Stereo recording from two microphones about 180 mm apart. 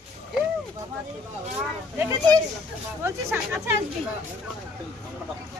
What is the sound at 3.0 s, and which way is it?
Speech, 15° right (ahead or behind).